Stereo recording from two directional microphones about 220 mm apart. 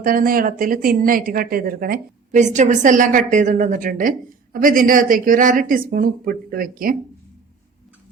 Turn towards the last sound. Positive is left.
turn(degrees=-40)  # may be behind; listen again after turning